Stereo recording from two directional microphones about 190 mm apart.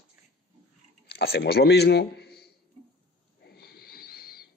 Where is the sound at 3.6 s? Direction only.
55° left (ahead or behind).